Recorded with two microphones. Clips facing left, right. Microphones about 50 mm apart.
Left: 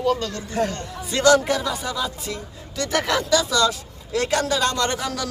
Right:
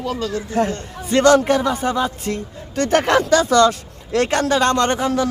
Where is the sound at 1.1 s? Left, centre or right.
Right.